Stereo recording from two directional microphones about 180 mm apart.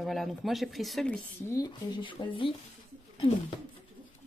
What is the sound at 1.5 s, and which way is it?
Speech, 20° left (ahead or behind).